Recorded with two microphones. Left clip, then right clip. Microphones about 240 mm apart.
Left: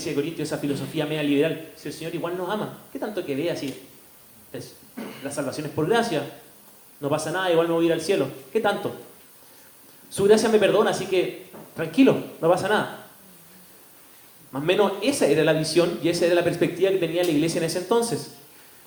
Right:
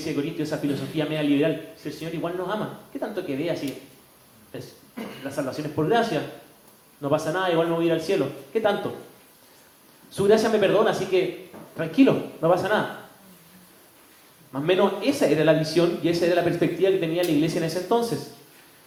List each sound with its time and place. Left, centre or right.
0.3 s speech: left
10.1 s speech: left
14.5 s speech: left